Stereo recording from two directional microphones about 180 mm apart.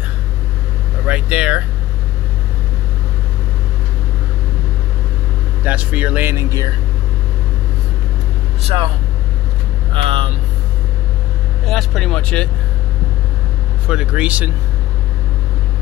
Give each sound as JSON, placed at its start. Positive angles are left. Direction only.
{"t": 1.0, "sound": "vehicle", "side_deg": -5}
{"t": 5.6, "sound": "speech", "side_deg": -10}
{"t": 8.6, "sound": "speech", "side_deg": -30}
{"t": 9.9, "sound": "speech", "side_deg": -30}
{"t": 11.6, "sound": "speech", "side_deg": 0}
{"t": 13.8, "sound": "speech", "side_deg": -5}